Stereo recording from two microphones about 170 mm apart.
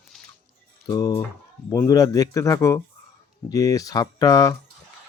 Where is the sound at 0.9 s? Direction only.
20° left (ahead or behind).